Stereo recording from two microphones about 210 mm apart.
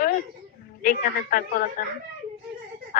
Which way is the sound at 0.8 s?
40° left (ahead or behind).